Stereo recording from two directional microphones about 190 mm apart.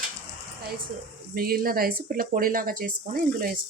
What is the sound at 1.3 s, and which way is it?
Speech, 50° right (ahead or behind).